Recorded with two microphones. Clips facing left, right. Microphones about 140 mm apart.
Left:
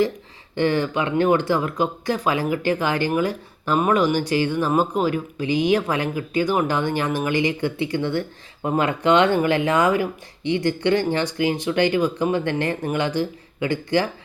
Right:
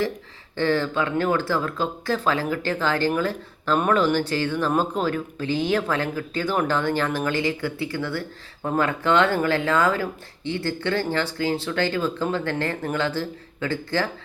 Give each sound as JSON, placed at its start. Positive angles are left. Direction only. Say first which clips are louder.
{"t": 0.5, "sound": "speech", "louder": "left 2 dB", "side_deg": 15}